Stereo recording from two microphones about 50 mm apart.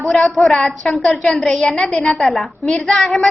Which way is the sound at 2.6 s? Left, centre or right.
Centre.